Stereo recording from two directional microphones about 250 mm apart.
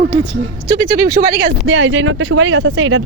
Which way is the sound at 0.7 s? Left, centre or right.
Right.